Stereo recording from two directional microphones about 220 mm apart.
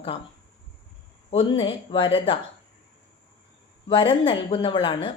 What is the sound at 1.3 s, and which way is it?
Speech, 25° left (ahead or behind).